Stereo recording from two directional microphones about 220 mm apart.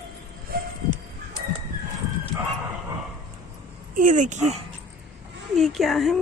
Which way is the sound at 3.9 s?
35° right (ahead or behind).